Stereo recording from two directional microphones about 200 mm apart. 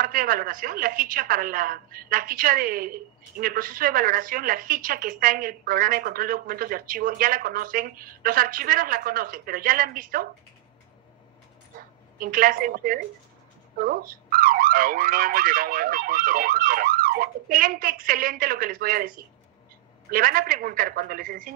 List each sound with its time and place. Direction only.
0.0 s a woman's voice: 45° right (ahead or behind)
12.2 s a woman's voice: 45° right (ahead or behind)